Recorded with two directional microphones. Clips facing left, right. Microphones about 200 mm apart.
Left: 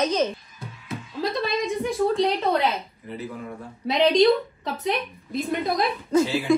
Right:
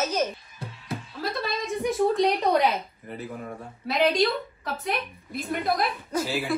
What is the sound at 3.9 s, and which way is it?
Speech, 5° right (ahead or behind).